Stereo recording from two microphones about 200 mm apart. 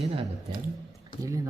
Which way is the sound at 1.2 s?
15° right (ahead or behind).